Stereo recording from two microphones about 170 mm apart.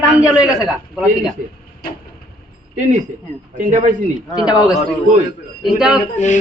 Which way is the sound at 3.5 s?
45° right (ahead or behind).